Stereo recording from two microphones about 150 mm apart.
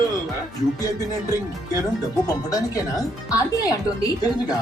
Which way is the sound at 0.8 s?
25° left (ahead or behind).